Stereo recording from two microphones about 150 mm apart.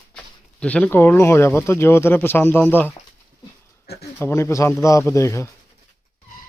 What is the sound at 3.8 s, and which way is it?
Speech, 90° left.